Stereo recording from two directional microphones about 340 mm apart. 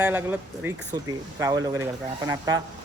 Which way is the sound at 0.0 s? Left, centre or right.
Centre.